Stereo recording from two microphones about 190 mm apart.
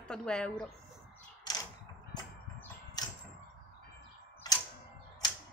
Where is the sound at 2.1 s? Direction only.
20° left (ahead or behind).